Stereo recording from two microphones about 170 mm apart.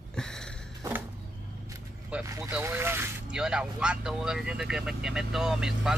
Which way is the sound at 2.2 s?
20° right (ahead or behind).